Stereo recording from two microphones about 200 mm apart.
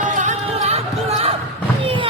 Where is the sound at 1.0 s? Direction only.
30° right (ahead or behind).